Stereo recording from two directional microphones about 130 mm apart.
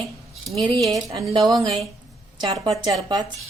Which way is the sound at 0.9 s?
25° right (ahead or behind).